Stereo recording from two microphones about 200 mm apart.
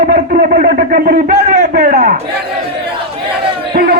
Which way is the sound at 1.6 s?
55° right (ahead or behind).